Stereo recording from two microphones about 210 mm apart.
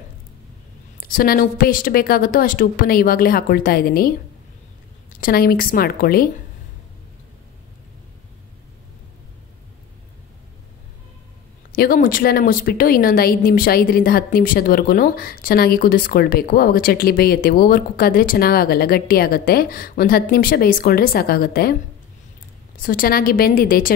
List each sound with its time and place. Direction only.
0.9 s a woman's voice: 45° left (ahead or behind)
5.2 s a woman's voice: 45° left (ahead or behind)
11.7 s a woman's voice: 45° left (ahead or behind)
22.8 s a woman's voice: 40° left (ahead or behind)